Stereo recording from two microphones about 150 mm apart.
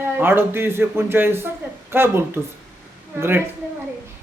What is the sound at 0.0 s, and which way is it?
A man's voice, 15° right (ahead or behind).